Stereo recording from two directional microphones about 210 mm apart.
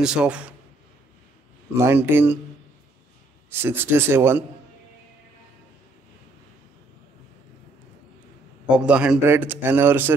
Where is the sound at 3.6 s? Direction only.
10° right (ahead or behind).